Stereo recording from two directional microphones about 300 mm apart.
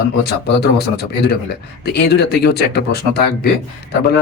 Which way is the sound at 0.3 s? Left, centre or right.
Left.